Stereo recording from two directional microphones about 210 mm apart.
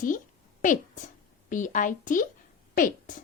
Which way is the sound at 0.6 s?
35° left (ahead or behind).